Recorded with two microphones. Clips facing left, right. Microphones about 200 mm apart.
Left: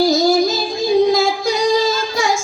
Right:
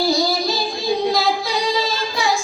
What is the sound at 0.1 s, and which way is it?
Child singing, 45° left (ahead or behind).